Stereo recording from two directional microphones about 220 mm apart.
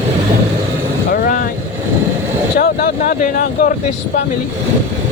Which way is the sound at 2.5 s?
45° left (ahead or behind).